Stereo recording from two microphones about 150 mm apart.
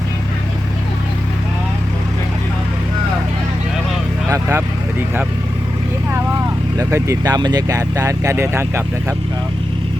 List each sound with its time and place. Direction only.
4.3 s vehicle: 20° right (ahead or behind)
6.7 s speech: 20° right (ahead or behind)